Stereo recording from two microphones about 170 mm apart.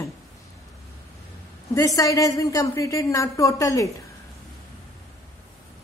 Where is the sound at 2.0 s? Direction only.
20° left (ahead or behind).